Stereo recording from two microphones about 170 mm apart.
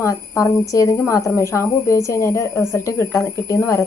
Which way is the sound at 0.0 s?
20° left (ahead or behind).